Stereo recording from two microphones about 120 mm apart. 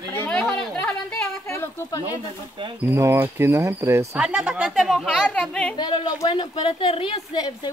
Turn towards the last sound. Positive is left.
turn(degrees=40)  # may be behind; listen again after turning